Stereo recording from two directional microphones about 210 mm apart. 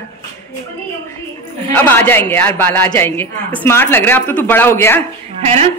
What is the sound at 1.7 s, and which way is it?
Speech, 10° left (ahead or behind).